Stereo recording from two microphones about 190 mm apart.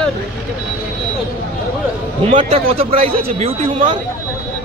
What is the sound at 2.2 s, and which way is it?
A man's voice, 35° right (ahead or behind).